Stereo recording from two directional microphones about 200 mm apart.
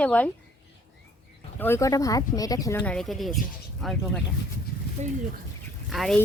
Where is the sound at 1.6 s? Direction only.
10° left (ahead or behind).